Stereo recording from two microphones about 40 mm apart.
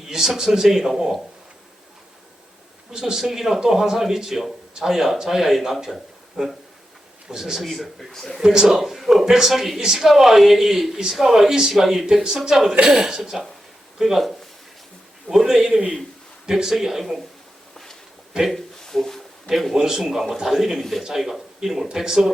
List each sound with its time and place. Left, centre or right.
0.1 s speech: centre
2.9 s speech: centre
7.6 s a man's voice: centre
8.4 s speech: centre
11.7 s speech: centre
18.5 s a sound: centre
19.5 s a man's voice: centre